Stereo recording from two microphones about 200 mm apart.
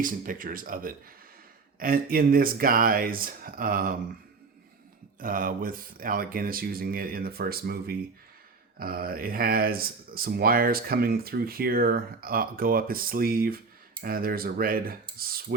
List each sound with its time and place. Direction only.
0.0 s speech: 45° right (ahead or behind)
5.2 s speech: 45° right (ahead or behind)